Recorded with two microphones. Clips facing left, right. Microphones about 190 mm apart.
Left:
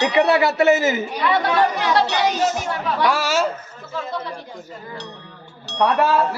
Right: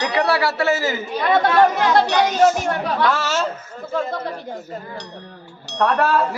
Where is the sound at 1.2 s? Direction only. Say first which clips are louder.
Right 4 dB; 50° right (ahead or behind).